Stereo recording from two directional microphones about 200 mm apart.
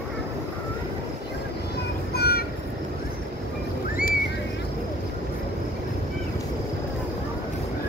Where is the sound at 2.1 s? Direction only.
50° left (ahead or behind).